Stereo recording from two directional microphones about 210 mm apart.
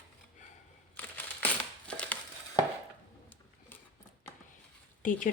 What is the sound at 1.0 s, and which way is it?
Crumpling, 10° left (ahead or behind).